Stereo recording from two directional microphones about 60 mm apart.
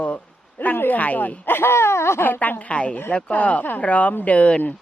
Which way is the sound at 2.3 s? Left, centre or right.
Left.